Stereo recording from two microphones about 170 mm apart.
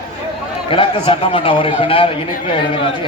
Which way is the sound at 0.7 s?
30° left (ahead or behind).